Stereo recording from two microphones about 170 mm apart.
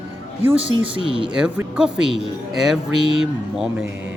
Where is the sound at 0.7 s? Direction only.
30° right (ahead or behind).